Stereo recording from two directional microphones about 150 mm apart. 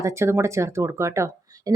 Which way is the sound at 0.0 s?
20° right (ahead or behind).